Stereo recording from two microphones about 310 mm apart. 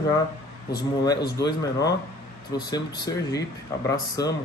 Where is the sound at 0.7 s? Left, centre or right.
Left.